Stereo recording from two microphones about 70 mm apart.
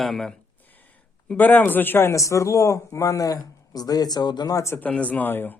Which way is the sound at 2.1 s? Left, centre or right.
Left.